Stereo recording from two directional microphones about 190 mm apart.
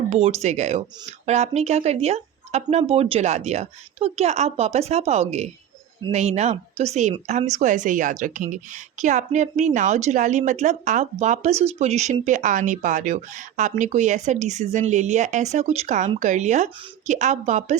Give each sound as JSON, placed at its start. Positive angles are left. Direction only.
{"t": 0.1, "sound": "speech", "side_deg": -30}